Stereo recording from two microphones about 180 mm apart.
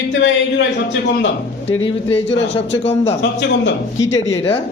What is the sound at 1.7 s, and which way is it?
Speech, 35° left (ahead or behind).